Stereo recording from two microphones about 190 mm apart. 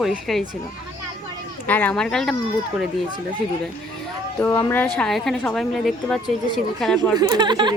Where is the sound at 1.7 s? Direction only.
10° left (ahead or behind).